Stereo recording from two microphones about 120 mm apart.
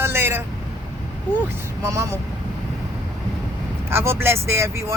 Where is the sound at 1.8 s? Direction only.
25° right (ahead or behind).